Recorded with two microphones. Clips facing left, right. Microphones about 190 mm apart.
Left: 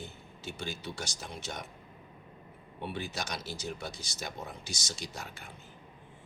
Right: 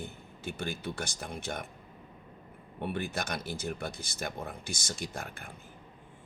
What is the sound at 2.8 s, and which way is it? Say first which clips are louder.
Speech: right 3 dB; 55° right (ahead or behind).